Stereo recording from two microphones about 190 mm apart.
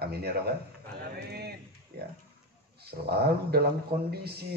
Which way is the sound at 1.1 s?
55° right (ahead or behind).